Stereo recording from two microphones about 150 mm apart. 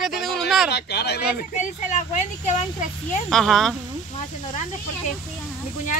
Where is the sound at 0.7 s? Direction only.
90° left.